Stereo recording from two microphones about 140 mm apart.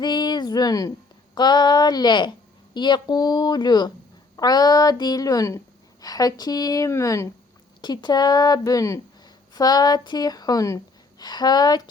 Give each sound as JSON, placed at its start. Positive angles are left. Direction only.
{"t": 0.0, "sound": "a woman's voice", "side_deg": 30}
{"t": 7.8, "sound": "a woman's voice", "side_deg": 30}